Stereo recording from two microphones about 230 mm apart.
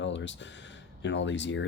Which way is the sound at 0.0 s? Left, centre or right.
Left.